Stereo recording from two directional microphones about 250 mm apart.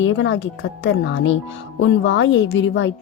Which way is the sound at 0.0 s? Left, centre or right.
Left.